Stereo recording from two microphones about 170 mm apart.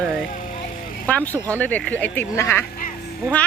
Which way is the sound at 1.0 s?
10° left (ahead or behind).